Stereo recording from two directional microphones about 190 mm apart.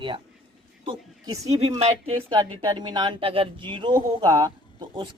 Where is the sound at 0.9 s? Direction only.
20° right (ahead or behind).